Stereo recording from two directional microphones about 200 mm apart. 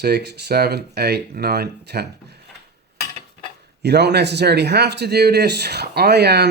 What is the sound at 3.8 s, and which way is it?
Speech, 55° right (ahead or behind).